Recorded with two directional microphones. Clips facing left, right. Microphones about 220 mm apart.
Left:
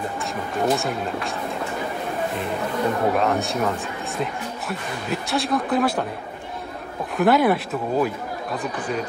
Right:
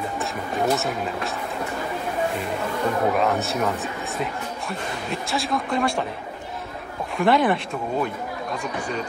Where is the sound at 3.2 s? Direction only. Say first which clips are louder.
Left 1 dB; centre (ahead or behind).